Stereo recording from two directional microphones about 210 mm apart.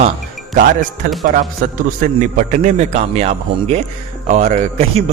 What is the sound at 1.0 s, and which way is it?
A man's voice, 40° right (ahead or behind).